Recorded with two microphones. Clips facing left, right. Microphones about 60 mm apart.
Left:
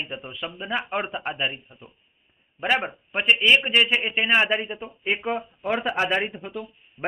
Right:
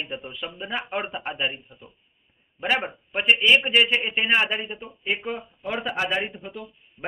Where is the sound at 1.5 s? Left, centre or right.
Left.